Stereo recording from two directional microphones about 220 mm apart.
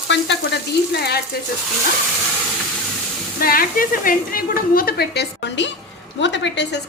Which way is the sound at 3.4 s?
40° left (ahead or behind).